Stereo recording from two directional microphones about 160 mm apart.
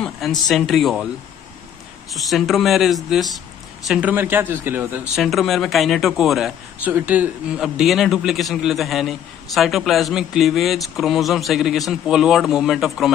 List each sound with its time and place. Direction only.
0.0 s a man's voice: centre (ahead or behind)
2.1 s a man's voice: centre (ahead or behind)
5.1 s a man's voice: centre (ahead or behind)
6.9 s a man's voice: 10° right (ahead or behind)